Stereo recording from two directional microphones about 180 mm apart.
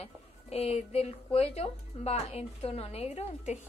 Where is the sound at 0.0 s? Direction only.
35° left (ahead or behind).